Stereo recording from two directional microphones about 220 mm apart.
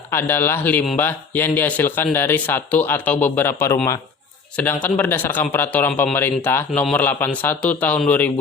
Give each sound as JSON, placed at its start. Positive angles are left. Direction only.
{"t": 0.1, "sound": "a man's voice", "side_deg": 10}